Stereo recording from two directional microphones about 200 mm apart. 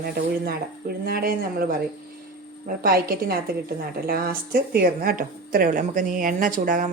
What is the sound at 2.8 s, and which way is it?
A woman's voice, 50° right (ahead or behind).